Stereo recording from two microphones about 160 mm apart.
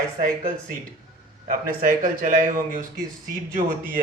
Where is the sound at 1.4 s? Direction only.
60° right (ahead or behind).